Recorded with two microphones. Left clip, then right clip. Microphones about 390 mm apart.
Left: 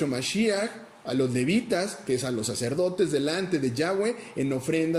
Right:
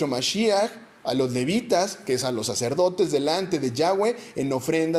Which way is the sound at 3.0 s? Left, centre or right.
Centre.